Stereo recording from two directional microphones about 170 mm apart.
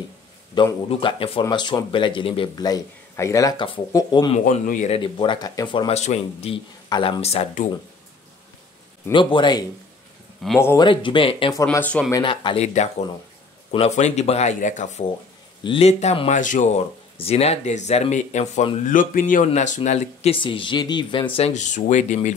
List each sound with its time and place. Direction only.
0.8 s speech: 35° left (ahead or behind)
4.5 s speech: 50° left (ahead or behind)
4.9 s speech: 30° left (ahead or behind)
5.9 s speech: 40° left (ahead or behind)
9.1 s speech: 30° left (ahead or behind)
10.4 s speech: centre (ahead or behind)
10.8 s speech: 30° left (ahead or behind)
11.7 s speech: 10° left (ahead or behind)
12.1 s speech: 25° left (ahead or behind)
12.6 s speech: 40° left (ahead or behind)
15.6 s speech: 35° left (ahead or behind)
17.2 s speech: 35° left (ahead or behind)
18.9 s speech: 50° left (ahead or behind)